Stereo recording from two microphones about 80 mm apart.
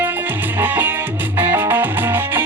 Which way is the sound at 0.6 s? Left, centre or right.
Right.